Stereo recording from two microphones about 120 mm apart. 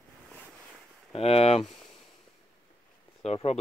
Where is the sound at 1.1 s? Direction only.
55° left (ahead or behind).